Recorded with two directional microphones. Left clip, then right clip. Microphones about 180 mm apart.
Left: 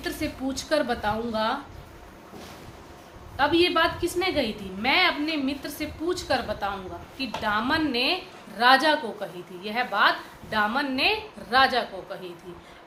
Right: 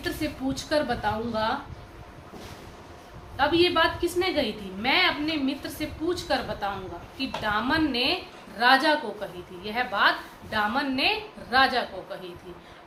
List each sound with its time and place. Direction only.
0.0 s a woman's voice: 50° left (ahead or behind)
3.3 s a woman's voice: 45° left (ahead or behind)